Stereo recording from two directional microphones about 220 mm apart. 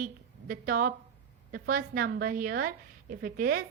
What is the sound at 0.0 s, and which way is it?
A woman's voice, 40° right (ahead or behind).